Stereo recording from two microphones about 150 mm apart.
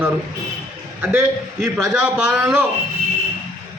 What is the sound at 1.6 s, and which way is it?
A man's voice, centre (ahead or behind).